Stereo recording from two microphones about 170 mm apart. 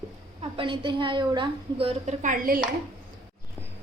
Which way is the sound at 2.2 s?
55° right (ahead or behind).